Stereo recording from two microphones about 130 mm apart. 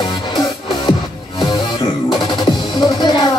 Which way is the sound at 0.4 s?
30° left (ahead or behind).